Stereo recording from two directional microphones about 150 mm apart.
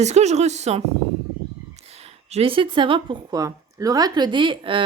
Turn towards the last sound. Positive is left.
turn(degrees=-30)  # may be behind; listen again after turning